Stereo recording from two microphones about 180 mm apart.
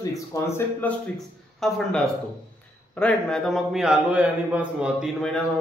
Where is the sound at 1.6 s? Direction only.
Centre (ahead or behind).